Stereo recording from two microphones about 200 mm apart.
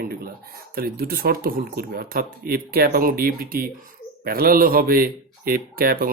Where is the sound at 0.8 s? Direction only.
50° right (ahead or behind).